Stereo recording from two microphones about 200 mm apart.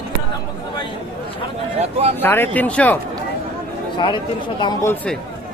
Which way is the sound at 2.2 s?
10° left (ahead or behind).